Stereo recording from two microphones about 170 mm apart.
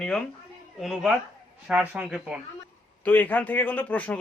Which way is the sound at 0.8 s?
Centre (ahead or behind).